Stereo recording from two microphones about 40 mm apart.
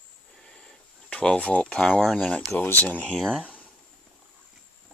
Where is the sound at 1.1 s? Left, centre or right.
Left.